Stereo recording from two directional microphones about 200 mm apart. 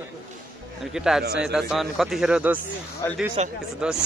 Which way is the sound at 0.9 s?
Centre (ahead or behind).